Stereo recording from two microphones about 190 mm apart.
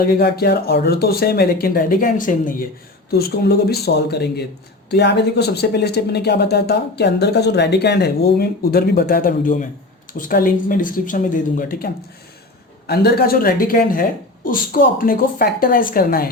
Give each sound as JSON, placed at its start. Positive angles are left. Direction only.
{"t": 0.0, "sound": "speech", "side_deg": 50}
{"t": 12.9, "sound": "speech", "side_deg": 55}